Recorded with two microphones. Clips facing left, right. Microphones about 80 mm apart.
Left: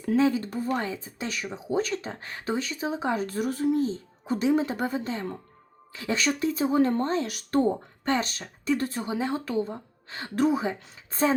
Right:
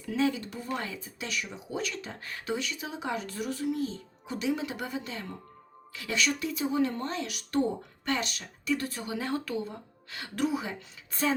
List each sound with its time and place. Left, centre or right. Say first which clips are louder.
0.0 s speech: left 6 dB; left
9.1 s speech: left 4 dB; left